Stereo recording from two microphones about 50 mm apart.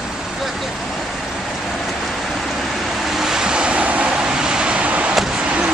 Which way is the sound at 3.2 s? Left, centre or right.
Centre.